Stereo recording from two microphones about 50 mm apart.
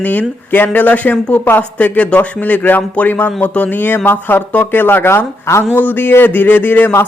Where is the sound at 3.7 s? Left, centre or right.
Left.